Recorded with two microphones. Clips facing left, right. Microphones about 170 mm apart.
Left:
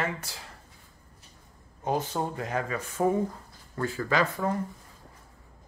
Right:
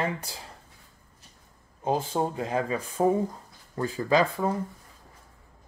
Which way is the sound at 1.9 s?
25° right (ahead or behind).